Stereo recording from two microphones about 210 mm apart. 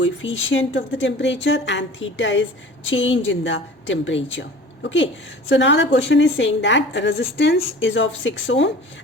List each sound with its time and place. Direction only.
0.0 s a woman's voice: 65° left (ahead or behind)